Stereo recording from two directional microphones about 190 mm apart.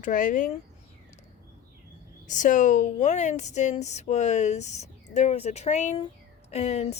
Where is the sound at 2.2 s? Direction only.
40° left (ahead or behind).